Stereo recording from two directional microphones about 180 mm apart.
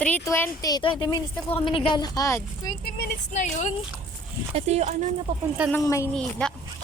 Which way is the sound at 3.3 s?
40° left (ahead or behind).